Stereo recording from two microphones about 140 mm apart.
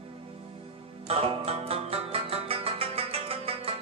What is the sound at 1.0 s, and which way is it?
Music, 45° right (ahead or behind).